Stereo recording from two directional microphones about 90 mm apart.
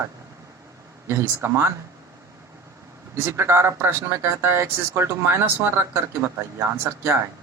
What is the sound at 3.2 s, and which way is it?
Speech, 30° right (ahead or behind).